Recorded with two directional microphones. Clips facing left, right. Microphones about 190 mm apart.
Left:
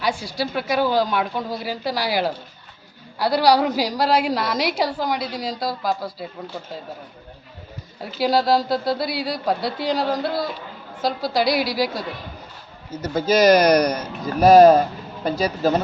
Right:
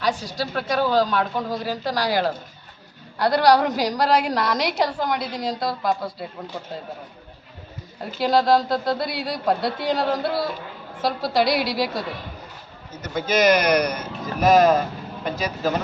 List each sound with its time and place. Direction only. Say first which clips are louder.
0.3 s a man's voice: left 2 dB; 10° left (ahead or behind)
8.2 s a man's voice: even; 5° left (ahead or behind)
13.0 s speech: left 3 dB; 30° left (ahead or behind)